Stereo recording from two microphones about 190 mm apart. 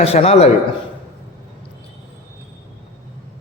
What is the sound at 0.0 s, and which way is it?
Speech, 35° left (ahead or behind).